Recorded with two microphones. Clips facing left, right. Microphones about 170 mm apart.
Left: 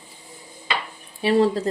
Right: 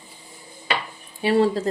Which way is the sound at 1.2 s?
35° left (ahead or behind).